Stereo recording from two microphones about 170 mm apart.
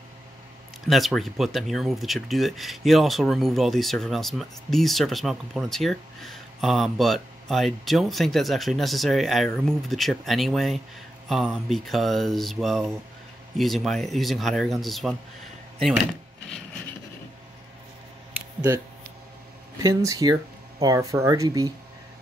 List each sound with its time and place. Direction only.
0.8 s speech: centre (ahead or behind)
19.8 s speech: 20° right (ahead or behind)